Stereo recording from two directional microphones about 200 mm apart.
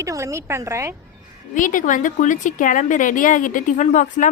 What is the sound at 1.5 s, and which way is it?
A woman's voice, 40° left (ahead or behind).